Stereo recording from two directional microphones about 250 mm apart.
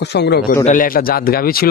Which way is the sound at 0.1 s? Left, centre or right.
Left.